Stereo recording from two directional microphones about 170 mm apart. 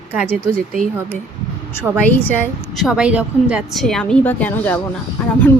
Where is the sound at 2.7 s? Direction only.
5° right (ahead or behind).